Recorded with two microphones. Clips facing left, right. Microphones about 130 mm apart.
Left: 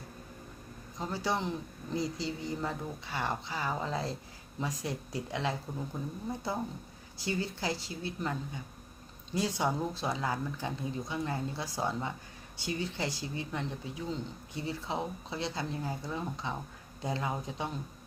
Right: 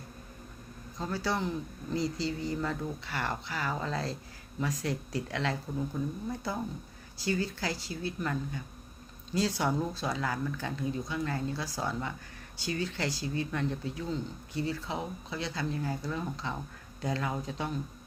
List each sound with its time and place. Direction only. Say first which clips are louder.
0.9 s speech: right 1 dB; 15° left (ahead or behind)